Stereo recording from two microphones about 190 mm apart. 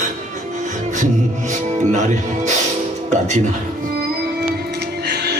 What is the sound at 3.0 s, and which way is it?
Speech, 35° right (ahead or behind).